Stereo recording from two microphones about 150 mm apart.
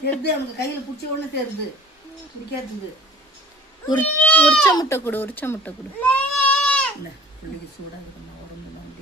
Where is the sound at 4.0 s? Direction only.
10° left (ahead or behind).